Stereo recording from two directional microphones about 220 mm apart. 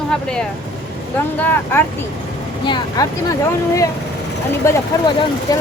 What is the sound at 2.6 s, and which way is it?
Speech, 20° left (ahead or behind).